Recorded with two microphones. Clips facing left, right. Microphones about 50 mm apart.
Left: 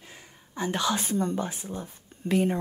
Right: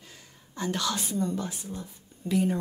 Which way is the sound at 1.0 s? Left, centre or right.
Left.